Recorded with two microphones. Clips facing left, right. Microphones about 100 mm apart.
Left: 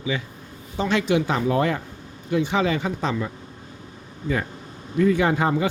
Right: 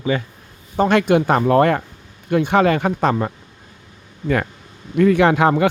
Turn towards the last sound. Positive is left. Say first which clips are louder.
# right 6 dB
turn(degrees=-70)  # may be behind; listen again after turning